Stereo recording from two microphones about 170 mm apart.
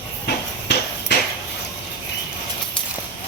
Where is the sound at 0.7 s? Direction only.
90° left.